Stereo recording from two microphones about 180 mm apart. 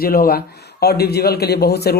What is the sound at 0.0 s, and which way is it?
A man's voice, 55° left (ahead or behind).